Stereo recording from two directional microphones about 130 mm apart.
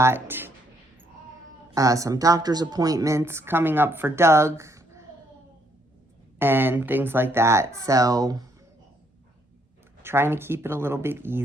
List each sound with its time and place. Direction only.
0.0 s speech: 15° right (ahead or behind)
1.7 s speech: 25° right (ahead or behind)
6.4 s speech: 15° right (ahead or behind)
10.0 s speech: 20° right (ahead or behind)